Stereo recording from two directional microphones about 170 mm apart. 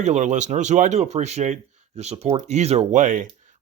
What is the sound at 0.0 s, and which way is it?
Speech, 45° right (ahead or behind).